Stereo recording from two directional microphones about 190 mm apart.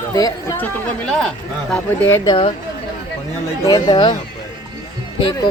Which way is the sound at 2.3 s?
30° left (ahead or behind).